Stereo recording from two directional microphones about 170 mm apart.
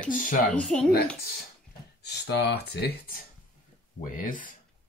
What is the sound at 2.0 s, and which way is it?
Speech, 75° left (ahead or behind).